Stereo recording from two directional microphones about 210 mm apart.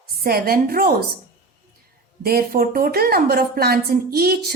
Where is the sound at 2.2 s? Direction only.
45° right (ahead or behind).